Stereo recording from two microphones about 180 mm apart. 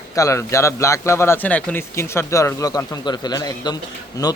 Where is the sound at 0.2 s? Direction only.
15° left (ahead or behind).